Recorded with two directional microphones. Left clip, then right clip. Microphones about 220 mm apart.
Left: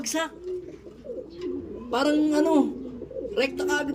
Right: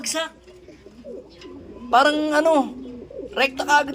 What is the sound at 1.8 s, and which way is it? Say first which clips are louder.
A man's voice: right 7 dB; centre (ahead or behind).